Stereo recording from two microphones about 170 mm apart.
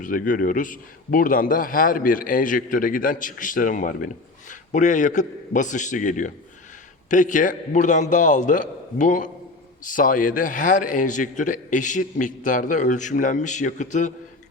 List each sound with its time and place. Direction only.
0.0 s a man's voice: 50° left (ahead or behind)